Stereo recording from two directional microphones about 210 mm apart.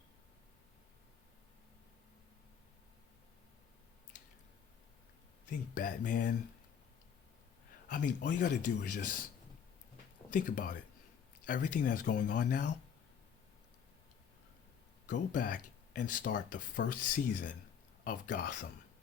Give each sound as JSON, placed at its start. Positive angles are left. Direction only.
{"t": 5.5, "sound": "speech", "side_deg": 40}
{"t": 7.9, "sound": "speech", "side_deg": 40}
{"t": 10.3, "sound": "speech", "side_deg": 40}
{"t": 15.0, "sound": "speech", "side_deg": 40}